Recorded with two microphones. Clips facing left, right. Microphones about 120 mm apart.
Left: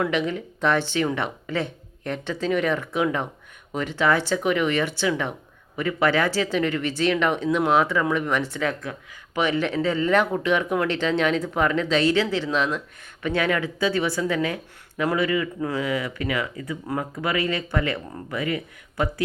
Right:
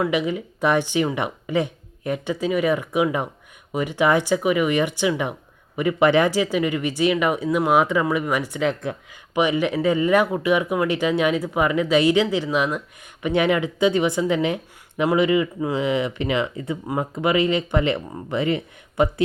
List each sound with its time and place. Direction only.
0.0 s speech: 10° right (ahead or behind)